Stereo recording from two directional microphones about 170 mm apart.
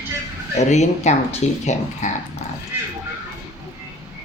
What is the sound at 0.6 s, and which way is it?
Speech, 40° left (ahead or behind).